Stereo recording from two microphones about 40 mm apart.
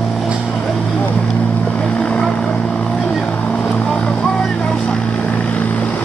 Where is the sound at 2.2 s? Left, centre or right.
Centre.